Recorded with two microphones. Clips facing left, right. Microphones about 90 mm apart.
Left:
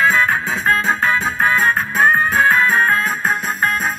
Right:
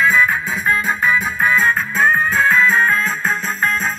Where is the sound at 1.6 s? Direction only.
20° left (ahead or behind).